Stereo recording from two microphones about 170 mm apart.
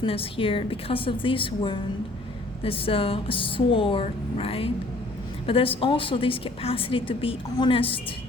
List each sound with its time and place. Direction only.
0.0 s a woman's voice: 35° left (ahead or behind)